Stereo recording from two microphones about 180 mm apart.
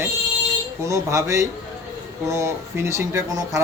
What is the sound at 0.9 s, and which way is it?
Speech, 15° right (ahead or behind).